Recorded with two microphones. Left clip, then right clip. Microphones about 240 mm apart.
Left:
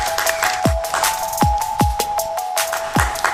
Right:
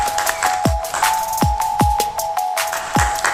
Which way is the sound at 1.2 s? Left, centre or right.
Centre.